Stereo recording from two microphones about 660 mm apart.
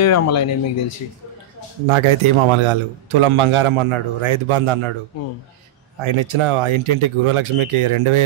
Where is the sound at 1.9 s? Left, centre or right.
Right.